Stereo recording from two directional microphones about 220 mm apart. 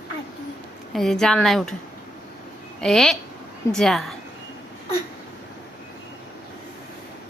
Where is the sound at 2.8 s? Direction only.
Centre (ahead or behind).